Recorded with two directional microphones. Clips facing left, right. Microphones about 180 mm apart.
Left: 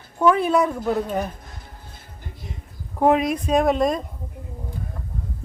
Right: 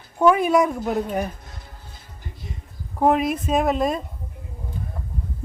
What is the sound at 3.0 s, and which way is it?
Speech, centre (ahead or behind).